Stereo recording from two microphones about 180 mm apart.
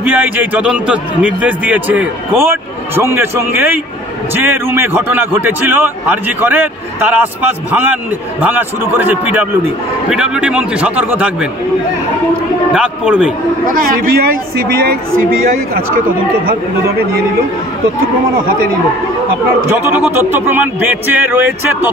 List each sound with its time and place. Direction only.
0.0 s a man's voice: 10° right (ahead or behind)
12.7 s a man's voice: 5° right (ahead or behind)
13.7 s speech: 50° right (ahead or behind)
19.7 s a man's voice: 10° right (ahead or behind)